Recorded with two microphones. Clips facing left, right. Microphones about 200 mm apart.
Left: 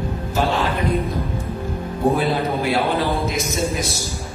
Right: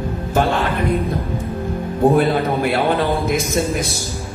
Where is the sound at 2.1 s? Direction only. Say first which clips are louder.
Right 4 dB; 55° right (ahead or behind).